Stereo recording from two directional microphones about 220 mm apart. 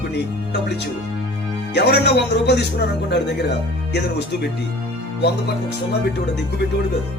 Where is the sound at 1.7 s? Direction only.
50° left (ahead or behind).